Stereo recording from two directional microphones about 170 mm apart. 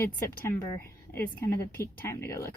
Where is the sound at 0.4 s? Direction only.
15° left (ahead or behind).